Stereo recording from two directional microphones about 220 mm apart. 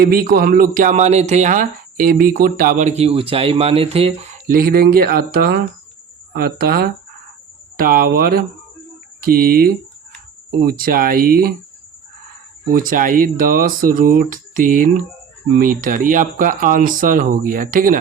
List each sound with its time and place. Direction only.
0.0 s speech: 40° right (ahead or behind)
12.7 s speech: 40° right (ahead or behind)